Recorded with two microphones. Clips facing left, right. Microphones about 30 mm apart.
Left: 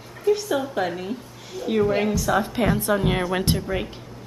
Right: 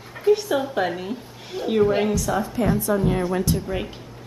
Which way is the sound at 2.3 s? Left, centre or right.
Left.